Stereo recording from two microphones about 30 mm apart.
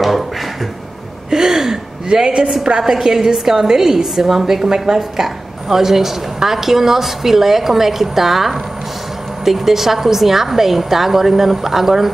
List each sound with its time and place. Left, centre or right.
1.3 s gasp: centre
2.0 s a woman's voice: right